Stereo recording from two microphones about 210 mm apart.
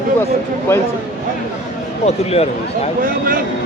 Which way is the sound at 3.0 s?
40° right (ahead or behind).